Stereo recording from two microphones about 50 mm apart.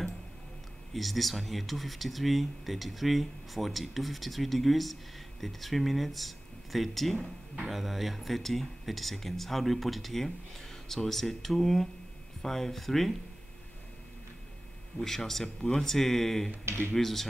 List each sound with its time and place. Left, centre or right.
0.9 s speech: centre
15.0 s speech: centre
16.6 s speech: right
16.9 s speech: centre